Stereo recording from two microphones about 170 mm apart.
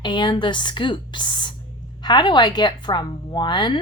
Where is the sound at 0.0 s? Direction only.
25° left (ahead or behind).